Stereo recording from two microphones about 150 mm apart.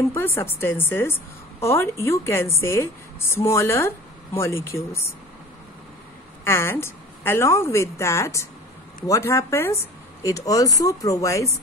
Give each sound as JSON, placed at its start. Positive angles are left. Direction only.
{"t": 0.1, "sound": "a woman's voice", "side_deg": 15}
{"t": 6.4, "sound": "a woman's voice", "side_deg": 15}